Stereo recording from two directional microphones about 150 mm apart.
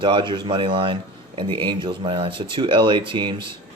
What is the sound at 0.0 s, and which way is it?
Speech, 30° right (ahead or behind).